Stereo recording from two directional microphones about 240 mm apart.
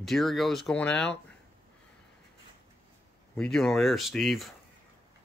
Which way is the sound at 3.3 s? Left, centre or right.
Centre.